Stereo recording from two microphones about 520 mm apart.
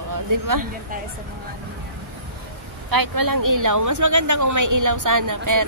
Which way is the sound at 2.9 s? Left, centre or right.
Right.